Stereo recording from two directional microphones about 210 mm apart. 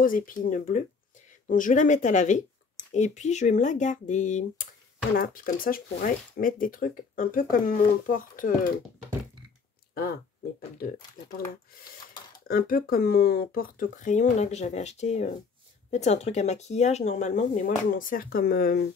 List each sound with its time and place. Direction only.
0.0 s speech: 40° left (ahead or behind)
12.4 s speech: 45° left (ahead or behind)